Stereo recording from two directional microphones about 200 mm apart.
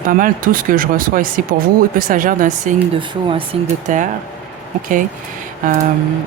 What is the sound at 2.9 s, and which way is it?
Speech, 25° right (ahead or behind).